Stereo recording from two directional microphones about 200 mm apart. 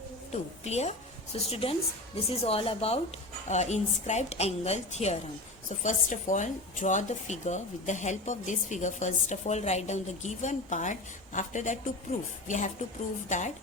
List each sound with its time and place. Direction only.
0.3 s a woman's voice: 35° left (ahead or behind)